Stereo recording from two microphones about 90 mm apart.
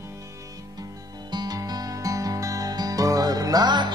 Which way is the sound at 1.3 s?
50° right (ahead or behind).